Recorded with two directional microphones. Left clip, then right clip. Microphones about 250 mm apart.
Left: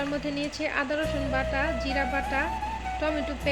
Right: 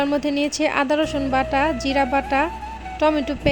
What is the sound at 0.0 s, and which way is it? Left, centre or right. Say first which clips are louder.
Speech: right 9 dB; right.